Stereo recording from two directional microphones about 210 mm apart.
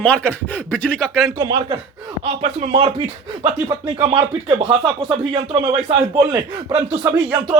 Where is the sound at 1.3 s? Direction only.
20° right (ahead or behind).